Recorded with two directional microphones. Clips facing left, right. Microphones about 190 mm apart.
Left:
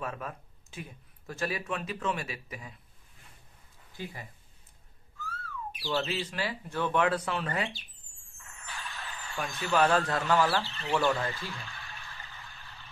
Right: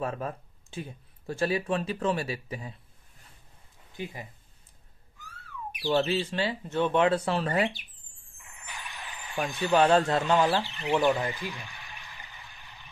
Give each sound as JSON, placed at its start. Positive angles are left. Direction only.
{"t": 0.0, "sound": "speech", "side_deg": -35}
{"t": 3.9, "sound": "speech", "side_deg": -20}
{"t": 5.2, "sound": "whistling", "side_deg": -15}
{"t": 6.1, "sound": "speech", "side_deg": -25}
{"t": 8.3, "sound": "vehicle", "side_deg": -15}
{"t": 9.9, "sound": "speech", "side_deg": -25}